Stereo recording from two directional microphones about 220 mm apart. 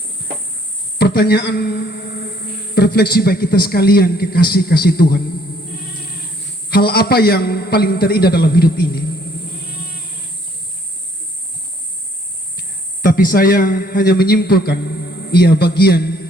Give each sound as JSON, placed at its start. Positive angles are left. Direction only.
{"t": 0.9, "sound": "a man's voice", "side_deg": 50}
{"t": 6.7, "sound": "a man's voice", "side_deg": 45}
{"t": 13.0, "sound": "a man's voice", "side_deg": 40}